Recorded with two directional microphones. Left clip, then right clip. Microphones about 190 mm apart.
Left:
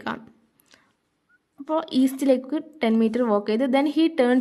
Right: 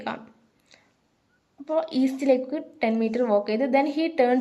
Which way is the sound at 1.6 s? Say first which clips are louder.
Left 1 dB; 40° left (ahead or behind).